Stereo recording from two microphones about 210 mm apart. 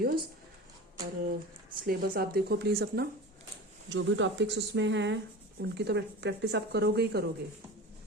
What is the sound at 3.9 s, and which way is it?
Speech, 60° right (ahead or behind).